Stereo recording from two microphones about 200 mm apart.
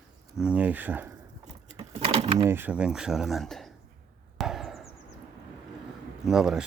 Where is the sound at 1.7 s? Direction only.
30° right (ahead or behind).